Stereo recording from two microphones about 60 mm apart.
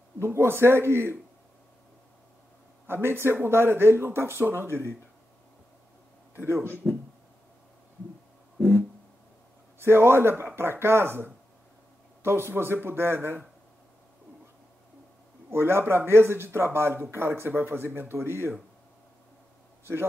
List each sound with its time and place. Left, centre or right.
0.2 s speech: right
2.9 s speech: right
6.3 s speech: right
9.8 s speech: right
15.5 s speech: right
19.8 s a man's voice: right